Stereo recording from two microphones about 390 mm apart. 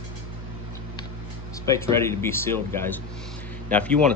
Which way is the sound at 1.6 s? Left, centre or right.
Centre.